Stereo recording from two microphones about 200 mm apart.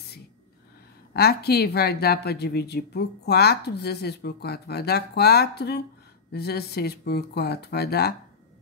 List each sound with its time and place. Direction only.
1.1 s speech: 50° left (ahead or behind)